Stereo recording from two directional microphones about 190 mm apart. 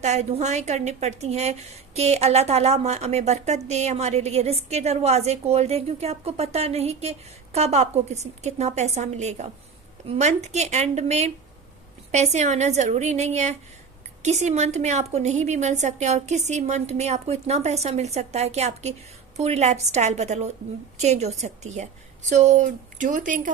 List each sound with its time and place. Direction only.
0.0 s a woman's voice: 35° right (ahead or behind)